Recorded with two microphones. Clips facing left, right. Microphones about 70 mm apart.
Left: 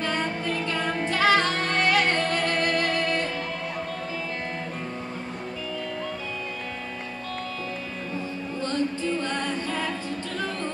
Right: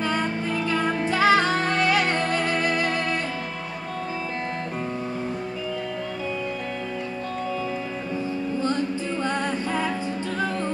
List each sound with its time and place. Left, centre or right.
0.7 s music: centre
9.2 s music: centre